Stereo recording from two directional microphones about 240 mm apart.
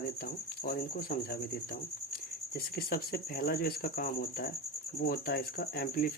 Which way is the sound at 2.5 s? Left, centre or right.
Left.